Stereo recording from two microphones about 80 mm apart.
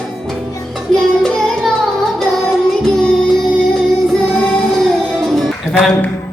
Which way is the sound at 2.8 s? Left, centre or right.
Centre.